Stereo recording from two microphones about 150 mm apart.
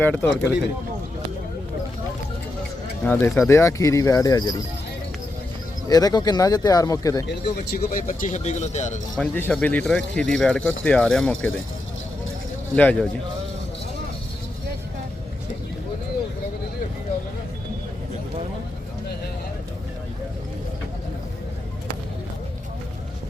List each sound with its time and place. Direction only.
0.0 s speech: 15° left (ahead or behind)
3.0 s speech: 15° left (ahead or behind)
5.9 s speech: 25° left (ahead or behind)
7.4 s speech: 90° left
7.9 s speech: 65° left (ahead or behind)
9.1 s speech: 5° left (ahead or behind)
12.7 s speech: 10° left (ahead or behind)